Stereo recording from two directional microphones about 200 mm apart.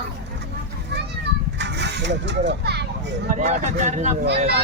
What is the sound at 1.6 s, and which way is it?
Speech, 60° right (ahead or behind).